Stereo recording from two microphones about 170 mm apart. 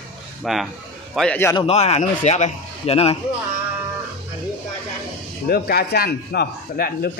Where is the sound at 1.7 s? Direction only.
40° left (ahead or behind).